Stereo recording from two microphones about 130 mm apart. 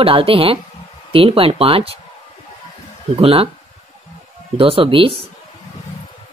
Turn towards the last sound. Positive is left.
turn(degrees=-45)  # may be behind; listen again after turning